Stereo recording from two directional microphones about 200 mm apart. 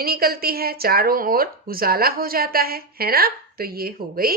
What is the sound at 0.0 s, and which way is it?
Speech, 50° right (ahead or behind).